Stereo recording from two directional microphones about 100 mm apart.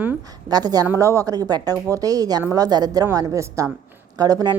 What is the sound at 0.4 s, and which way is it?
Speech, 40° right (ahead or behind).